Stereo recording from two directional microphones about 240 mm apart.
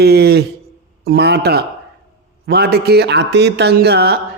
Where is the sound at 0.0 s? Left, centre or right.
Right.